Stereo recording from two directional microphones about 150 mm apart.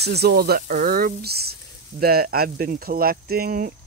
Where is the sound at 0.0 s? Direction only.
90° right.